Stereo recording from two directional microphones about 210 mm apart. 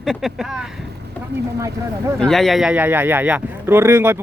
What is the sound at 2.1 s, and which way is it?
Speech, centre (ahead or behind).